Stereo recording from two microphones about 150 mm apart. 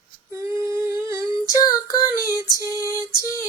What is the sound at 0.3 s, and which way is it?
Female singing, 20° right (ahead or behind).